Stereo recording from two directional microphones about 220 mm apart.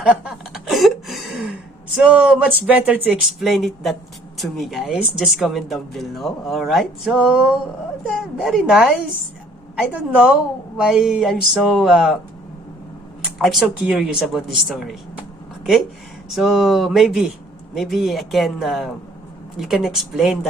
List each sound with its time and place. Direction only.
0.0 s a sound: 5° right (ahead or behind)
2.0 s speech: 5° right (ahead or behind)
13.4 s speech: centre (ahead or behind)
16.3 s speech: centre (ahead or behind)